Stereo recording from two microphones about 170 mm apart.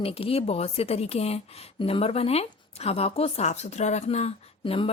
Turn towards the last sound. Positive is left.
turn(degrees=30)  # may be behind; listen again after turning